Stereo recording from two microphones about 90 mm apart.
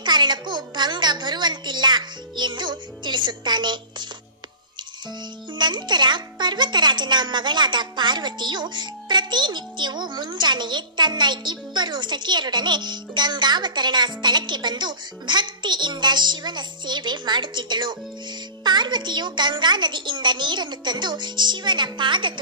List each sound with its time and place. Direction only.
0.0 s speech: 55° right (ahead or behind)
5.6 s speech: 55° right (ahead or behind)